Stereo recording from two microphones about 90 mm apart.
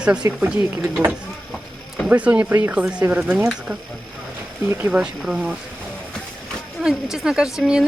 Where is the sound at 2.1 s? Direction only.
15° right (ahead or behind).